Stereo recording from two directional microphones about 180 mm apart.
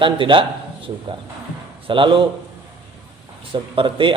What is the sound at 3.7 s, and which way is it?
Speech, 30° right (ahead or behind).